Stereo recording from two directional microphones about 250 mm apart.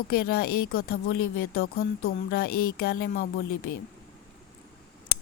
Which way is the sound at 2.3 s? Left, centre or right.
Left.